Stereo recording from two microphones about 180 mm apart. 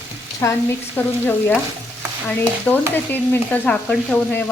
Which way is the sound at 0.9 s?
10° left (ahead or behind).